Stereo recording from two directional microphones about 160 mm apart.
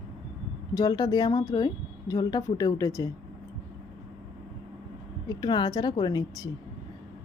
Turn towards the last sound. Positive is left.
turn(degrees=25)  # may be behind; listen again after turning